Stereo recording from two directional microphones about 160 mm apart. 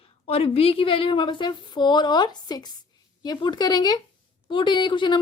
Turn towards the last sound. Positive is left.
turn(degrees=30)  # may be behind; listen again after turning